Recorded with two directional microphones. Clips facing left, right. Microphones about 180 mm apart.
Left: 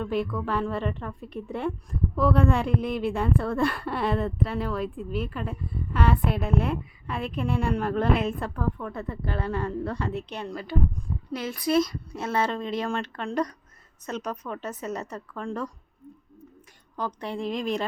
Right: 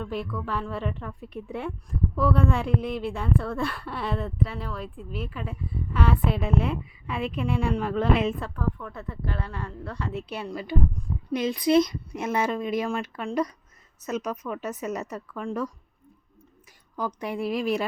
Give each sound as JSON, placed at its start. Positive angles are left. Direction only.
{"t": 0.0, "sound": "a woman's voice", "side_deg": 0}
{"t": 9.5, "sound": "a woman's voice", "side_deg": 55}
{"t": 10.1, "sound": "speech", "side_deg": -5}
{"t": 17.2, "sound": "speech", "side_deg": -10}